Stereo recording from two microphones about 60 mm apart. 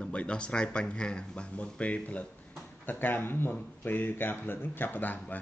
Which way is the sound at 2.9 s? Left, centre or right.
Left.